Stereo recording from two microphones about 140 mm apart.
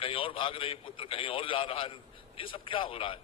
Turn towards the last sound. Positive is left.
turn(degrees=40)  # may be behind; listen again after turning